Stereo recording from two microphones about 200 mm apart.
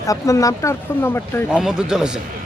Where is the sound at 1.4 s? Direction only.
5° right (ahead or behind).